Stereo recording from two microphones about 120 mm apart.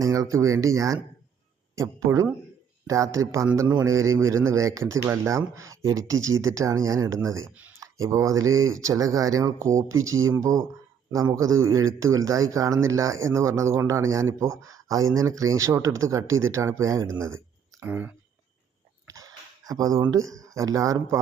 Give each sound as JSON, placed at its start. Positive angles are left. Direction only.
{"t": 0.0, "sound": "a man's voice", "side_deg": -25}
{"t": 19.0, "sound": "speech", "side_deg": -30}